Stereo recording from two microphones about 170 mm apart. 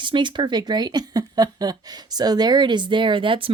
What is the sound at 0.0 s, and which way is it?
A woman's voice, 30° right (ahead or behind).